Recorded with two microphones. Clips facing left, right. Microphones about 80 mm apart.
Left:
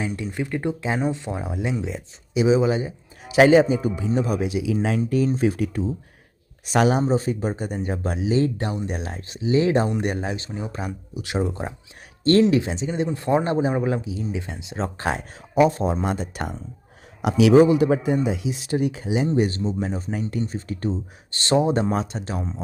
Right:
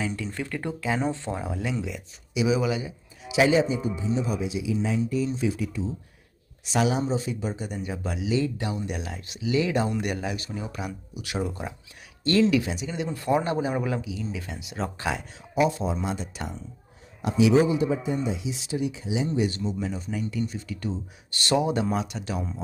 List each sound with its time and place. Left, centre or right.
0.3 s speech: centre; by 2.9 s left
3.2 s speech: left
17.2 s speech: left
19.4 s speech: left